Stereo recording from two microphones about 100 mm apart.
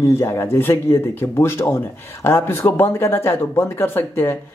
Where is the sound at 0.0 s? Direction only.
25° left (ahead or behind).